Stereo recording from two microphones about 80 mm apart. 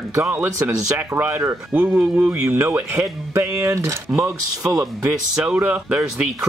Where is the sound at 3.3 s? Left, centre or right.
Right.